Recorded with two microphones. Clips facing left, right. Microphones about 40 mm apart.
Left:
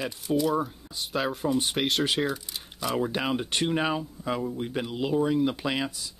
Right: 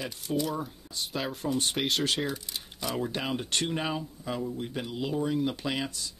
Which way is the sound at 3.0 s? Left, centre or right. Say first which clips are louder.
Left 4 dB; centre.